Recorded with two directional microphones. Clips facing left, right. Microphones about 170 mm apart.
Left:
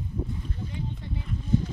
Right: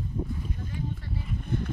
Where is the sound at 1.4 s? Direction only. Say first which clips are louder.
Left 7 dB; 60° right (ahead or behind).